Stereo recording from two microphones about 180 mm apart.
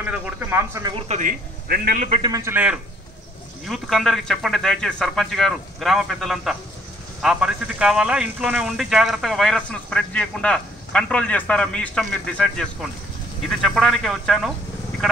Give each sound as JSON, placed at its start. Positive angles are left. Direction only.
{"t": 0.0, "sound": "speech", "side_deg": -15}
{"t": 0.9, "sound": "speech", "side_deg": -40}
{"t": 1.7, "sound": "a man's voice", "side_deg": -55}
{"t": 2.2, "sound": "speech", "side_deg": -15}